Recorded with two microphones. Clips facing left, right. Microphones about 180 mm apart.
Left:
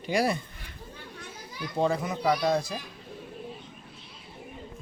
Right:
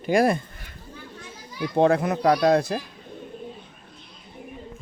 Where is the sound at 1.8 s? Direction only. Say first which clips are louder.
Right 7 dB; 65° right (ahead or behind).